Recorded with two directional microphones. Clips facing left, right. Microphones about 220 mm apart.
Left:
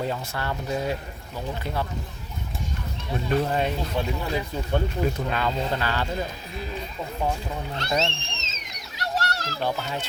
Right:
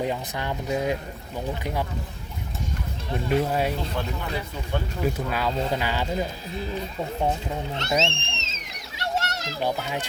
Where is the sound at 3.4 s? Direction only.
5° right (ahead or behind).